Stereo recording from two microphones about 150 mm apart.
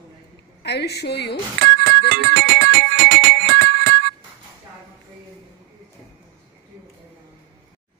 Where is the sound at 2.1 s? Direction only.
85° right.